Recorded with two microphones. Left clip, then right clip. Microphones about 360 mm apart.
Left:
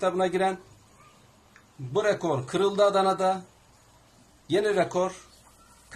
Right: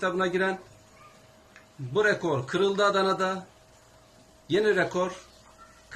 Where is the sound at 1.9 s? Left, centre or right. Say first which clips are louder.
Right 1 dB; centre.